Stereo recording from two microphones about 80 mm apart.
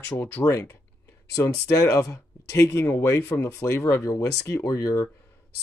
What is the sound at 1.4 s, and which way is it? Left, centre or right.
Speech, left.